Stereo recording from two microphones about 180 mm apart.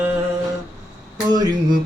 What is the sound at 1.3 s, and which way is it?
Speech, 20° right (ahead or behind).